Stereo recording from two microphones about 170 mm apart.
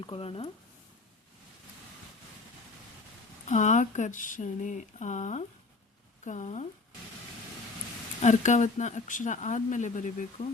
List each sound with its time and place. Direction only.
0.0 s speech: 30° left (ahead or behind)
3.4 s speech: 45° left (ahead or behind)
8.2 s speech: 45° left (ahead or behind)